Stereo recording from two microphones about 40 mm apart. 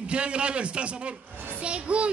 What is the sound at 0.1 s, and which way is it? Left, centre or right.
Speech, right.